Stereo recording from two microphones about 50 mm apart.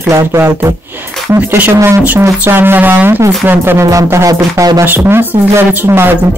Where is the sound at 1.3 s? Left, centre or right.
Right.